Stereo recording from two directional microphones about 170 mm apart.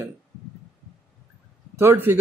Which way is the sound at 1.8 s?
15° right (ahead or behind).